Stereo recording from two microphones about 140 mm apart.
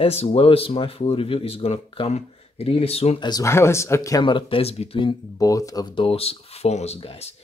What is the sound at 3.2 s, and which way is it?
Speech, 25° left (ahead or behind).